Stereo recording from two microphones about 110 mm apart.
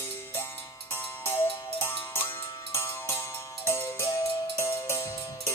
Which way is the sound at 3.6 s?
20° left (ahead or behind).